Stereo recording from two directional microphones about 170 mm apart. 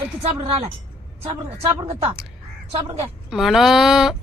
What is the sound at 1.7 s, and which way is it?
A woman's voice, 35° right (ahead or behind).